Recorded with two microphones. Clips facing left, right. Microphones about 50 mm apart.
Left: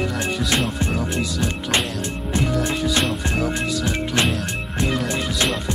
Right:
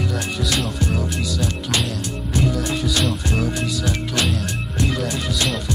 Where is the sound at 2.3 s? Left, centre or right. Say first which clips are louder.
Even; left.